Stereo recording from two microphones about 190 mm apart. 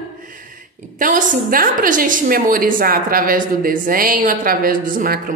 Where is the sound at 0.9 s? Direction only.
45° right (ahead or behind).